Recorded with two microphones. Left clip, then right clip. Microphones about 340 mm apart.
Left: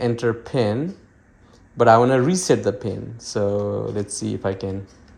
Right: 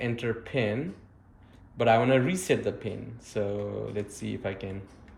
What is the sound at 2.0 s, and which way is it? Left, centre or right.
Speech, centre.